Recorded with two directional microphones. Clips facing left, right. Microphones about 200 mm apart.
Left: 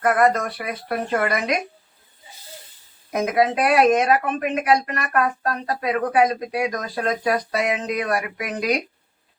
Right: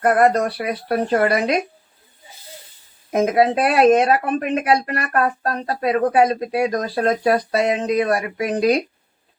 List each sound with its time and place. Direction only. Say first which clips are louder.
0.0 s speech: right 3 dB; 35° right (ahead or behind)
3.1 s speech: right 4 dB; 30° right (ahead or behind)